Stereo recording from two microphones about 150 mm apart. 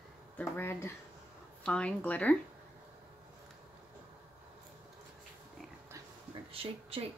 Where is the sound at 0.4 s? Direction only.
15° left (ahead or behind).